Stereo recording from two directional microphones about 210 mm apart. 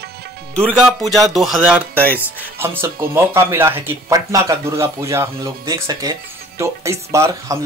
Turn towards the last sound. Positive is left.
turn(degrees=-15)  # may be behind; listen again after turning